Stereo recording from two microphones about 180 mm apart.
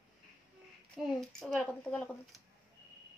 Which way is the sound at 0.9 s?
Centre (ahead or behind).